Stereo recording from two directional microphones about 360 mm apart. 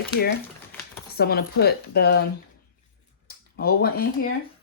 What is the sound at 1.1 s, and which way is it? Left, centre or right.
Speech, left.